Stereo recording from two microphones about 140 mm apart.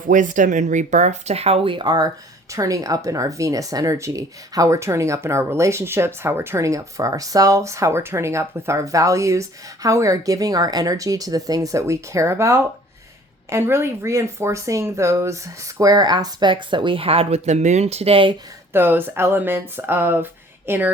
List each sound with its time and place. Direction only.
0.1 s speech: 65° right (ahead or behind); by 18.3 s 40° right (ahead or behind)
18.7 s speech: 15° right (ahead or behind)